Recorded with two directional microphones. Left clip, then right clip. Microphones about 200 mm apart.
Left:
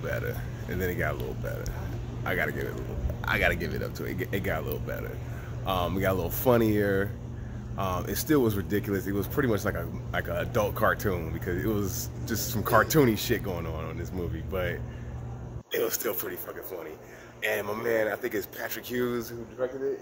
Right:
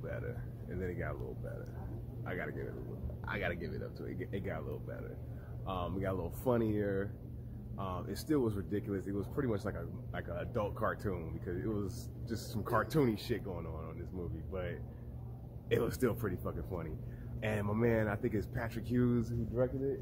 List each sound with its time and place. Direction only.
0.7 s speech: 15° left (ahead or behind)
2.2 s speech: 15° left (ahead or behind)
15.8 s speech: 15° left (ahead or behind)
17.4 s speech: 10° left (ahead or behind)